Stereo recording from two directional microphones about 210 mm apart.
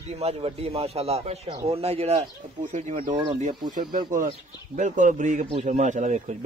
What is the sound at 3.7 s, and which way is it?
A man's voice, 40° right (ahead or behind).